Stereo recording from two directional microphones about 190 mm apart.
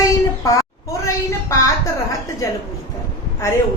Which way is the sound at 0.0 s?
15° left (ahead or behind).